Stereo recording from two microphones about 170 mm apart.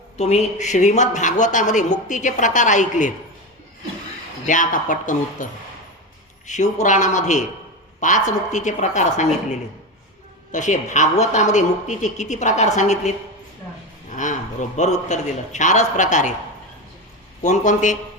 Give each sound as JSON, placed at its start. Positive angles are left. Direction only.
{"t": 0.2, "sound": "speech", "side_deg": 40}
{"t": 4.4, "sound": "speech", "side_deg": 50}
{"t": 6.5, "sound": "speech", "side_deg": 45}
{"t": 14.2, "sound": "speech", "side_deg": 50}
{"t": 17.4, "sound": "speech", "side_deg": 45}